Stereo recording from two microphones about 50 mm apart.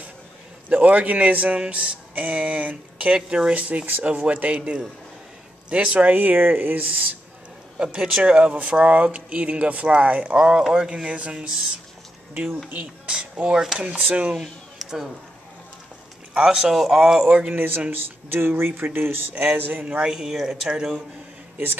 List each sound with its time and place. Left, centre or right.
0.7 s speech: right
3.5 s speech: right
6.1 s speech: right
7.8 s speech: centre
10.3 s speech: centre
13.1 s speech: right
14.3 s speech: centre
16.3 s speech: centre
17.5 s speech: right
19.5 s speech: right
20.1 s speech: centre